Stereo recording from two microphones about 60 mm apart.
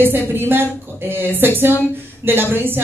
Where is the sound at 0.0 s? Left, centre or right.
Right.